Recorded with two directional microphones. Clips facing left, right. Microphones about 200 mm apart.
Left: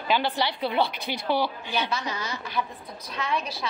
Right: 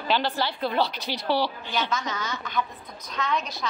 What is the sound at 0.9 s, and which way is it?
Speech, 55° left (ahead or behind).